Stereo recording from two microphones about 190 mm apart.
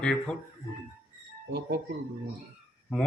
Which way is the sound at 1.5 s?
65° right (ahead or behind).